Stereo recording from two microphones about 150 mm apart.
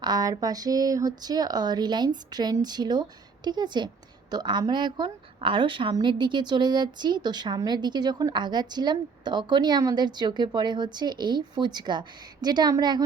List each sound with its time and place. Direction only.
0.0 s a woman's voice: 25° right (ahead or behind)